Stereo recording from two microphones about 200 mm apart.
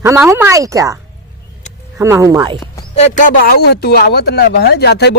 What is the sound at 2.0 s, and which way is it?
Speech, 15° right (ahead or behind).